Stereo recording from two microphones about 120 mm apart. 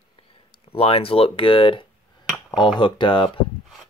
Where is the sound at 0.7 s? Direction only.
55° left (ahead or behind).